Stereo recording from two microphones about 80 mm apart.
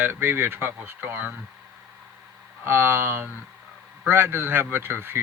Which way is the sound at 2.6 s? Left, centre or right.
Right.